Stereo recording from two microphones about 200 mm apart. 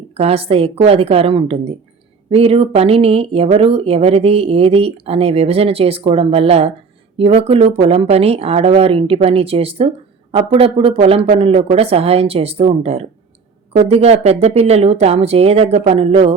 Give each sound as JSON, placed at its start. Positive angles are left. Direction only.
{"t": 0.1, "sound": "speech", "side_deg": -30}